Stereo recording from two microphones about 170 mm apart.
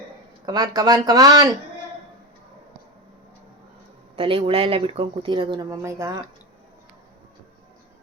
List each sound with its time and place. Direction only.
0.4 s speech: 25° right (ahead or behind)
4.2 s speech: 30° right (ahead or behind)